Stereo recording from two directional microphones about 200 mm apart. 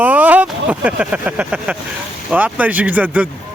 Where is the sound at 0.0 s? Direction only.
10° right (ahead or behind).